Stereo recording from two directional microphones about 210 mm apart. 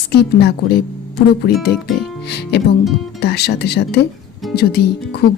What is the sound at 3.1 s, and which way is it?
Speech, 50° left (ahead or behind).